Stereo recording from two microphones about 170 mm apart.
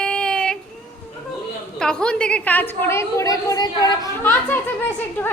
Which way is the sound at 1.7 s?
5° left (ahead or behind).